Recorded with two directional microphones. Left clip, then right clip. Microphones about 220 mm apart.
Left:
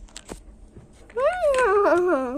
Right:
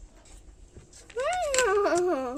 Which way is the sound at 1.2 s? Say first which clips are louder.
Left 6 dB; centre (ahead or behind).